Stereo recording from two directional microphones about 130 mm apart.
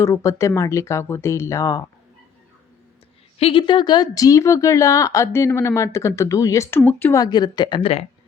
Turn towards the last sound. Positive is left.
turn(degrees=35)  # may be behind; listen again after turning